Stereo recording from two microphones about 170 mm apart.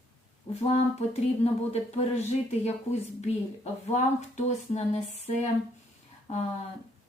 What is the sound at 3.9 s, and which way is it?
Speech, 40° left (ahead or behind).